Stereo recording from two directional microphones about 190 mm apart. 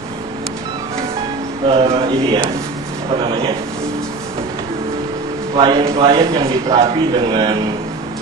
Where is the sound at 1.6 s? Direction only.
30° right (ahead or behind).